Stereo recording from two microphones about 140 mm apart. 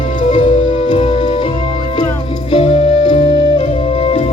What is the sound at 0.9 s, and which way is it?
Music, 40° left (ahead or behind).